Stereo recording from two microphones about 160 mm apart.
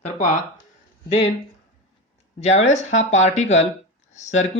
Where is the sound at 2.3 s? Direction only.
45° left (ahead or behind).